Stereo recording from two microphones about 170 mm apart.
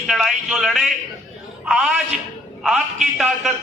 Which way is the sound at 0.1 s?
Centre (ahead or behind).